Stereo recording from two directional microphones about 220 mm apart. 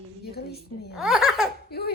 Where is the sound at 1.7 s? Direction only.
45° left (ahead or behind).